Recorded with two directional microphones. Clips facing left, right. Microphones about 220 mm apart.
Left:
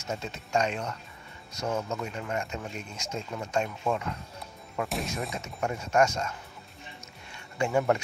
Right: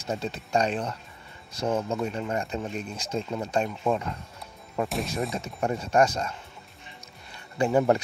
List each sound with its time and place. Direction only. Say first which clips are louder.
0.0 s speech: right 4 dB; 35° right (ahead or behind)
4.8 s speech: right 2 dB; centre (ahead or behind)
5.3 s speech: right 4 dB; 35° right (ahead or behind)
7.5 s speech: right 4 dB; 35° right (ahead or behind)